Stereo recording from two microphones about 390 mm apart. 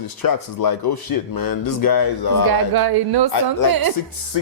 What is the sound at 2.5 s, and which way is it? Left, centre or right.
A woman's voice, right.